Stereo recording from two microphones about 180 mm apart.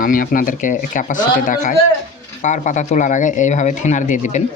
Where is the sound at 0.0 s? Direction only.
50° left (ahead or behind).